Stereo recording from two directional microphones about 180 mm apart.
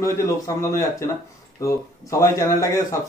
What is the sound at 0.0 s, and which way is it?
Speech, 15° left (ahead or behind).